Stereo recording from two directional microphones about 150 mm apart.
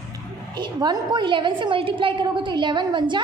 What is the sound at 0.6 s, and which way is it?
A woman's voice, 30° right (ahead or behind).